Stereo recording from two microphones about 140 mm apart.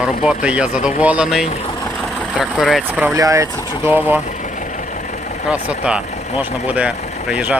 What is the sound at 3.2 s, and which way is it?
Speech, 25° right (ahead or behind).